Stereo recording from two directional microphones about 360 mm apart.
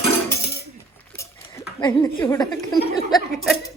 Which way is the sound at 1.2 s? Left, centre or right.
Centre.